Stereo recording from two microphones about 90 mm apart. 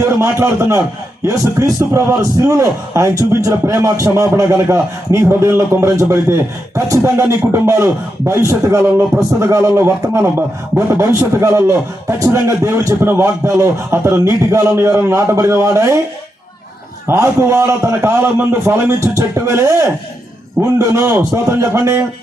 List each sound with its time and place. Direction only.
0.0 s a man's voice: 30° right (ahead or behind)
17.1 s a man's voice: 30° right (ahead or behind)